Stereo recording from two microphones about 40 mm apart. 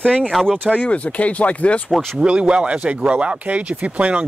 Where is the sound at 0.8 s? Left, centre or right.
Left.